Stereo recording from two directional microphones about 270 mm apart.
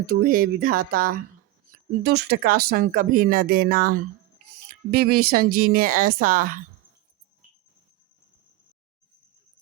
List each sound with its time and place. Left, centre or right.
0.0 s speech: right